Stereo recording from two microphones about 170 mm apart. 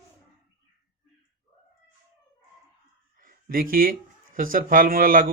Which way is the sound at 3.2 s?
55° right (ahead or behind).